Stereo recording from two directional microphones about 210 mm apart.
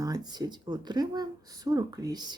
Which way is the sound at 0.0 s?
20° right (ahead or behind).